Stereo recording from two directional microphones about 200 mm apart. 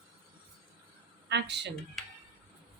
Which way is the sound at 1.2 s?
60° right (ahead or behind).